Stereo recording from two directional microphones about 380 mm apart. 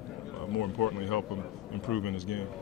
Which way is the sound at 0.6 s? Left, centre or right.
Left.